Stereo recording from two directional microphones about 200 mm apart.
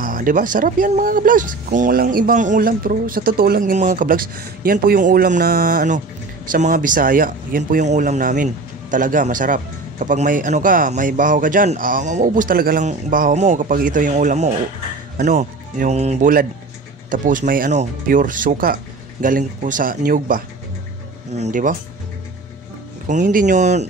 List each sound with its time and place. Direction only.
0.0 s a man's voice: 45° right (ahead or behind)
23.0 s a man's voice: 40° right (ahead or behind)